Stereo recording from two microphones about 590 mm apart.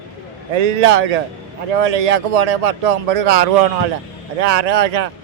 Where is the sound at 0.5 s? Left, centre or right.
Right.